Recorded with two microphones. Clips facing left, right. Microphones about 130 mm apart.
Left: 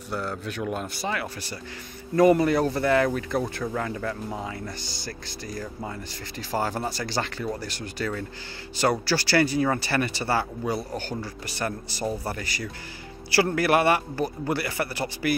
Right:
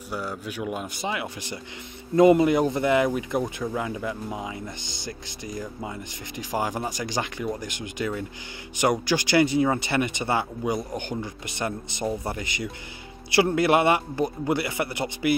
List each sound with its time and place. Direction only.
0.1 s speech: 10° right (ahead or behind)